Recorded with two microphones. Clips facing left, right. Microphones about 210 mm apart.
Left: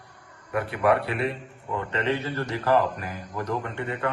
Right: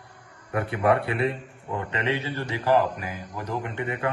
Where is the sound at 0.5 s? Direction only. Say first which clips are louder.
Even; 25° right (ahead or behind).